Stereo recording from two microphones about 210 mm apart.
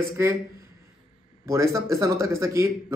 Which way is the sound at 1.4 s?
15° right (ahead or behind).